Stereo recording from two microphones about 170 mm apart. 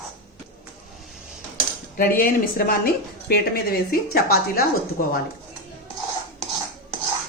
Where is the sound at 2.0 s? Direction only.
60° left (ahead or behind).